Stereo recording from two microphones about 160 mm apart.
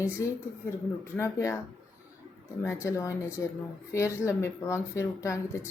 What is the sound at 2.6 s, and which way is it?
Speech, 20° left (ahead or behind).